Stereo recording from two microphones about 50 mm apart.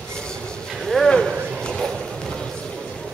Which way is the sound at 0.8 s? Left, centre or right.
Centre.